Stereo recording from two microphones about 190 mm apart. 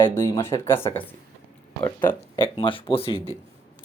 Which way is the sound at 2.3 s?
25° left (ahead or behind).